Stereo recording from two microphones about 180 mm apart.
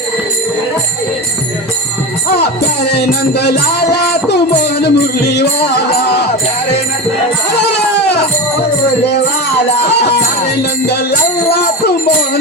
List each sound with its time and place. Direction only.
2.3 s music: 65° left (ahead or behind)
7.6 s baby cry: 65° left (ahead or behind)
9.8 s music: 65° left (ahead or behind)